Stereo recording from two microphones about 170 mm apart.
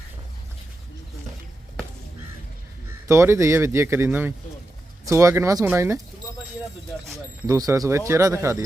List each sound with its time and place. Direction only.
3.1 s speech: 15° right (ahead or behind)
7.4 s speech: 20° right (ahead or behind)